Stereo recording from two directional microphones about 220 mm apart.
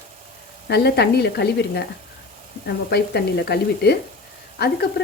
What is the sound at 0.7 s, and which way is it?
Speech, 50° left (ahead or behind).